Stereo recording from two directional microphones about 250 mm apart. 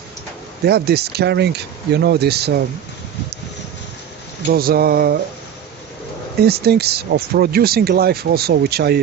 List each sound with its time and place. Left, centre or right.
0.6 s speech: right
4.4 s speech: right
6.4 s speech: right